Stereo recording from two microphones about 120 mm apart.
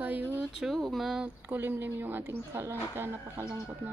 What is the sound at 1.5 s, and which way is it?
Speech, 20° right (ahead or behind).